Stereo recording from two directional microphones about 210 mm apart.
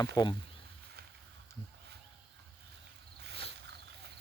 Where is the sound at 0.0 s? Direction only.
20° left (ahead or behind).